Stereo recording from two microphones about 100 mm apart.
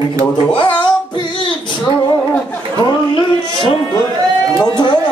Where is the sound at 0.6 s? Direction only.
50° left (ahead or behind).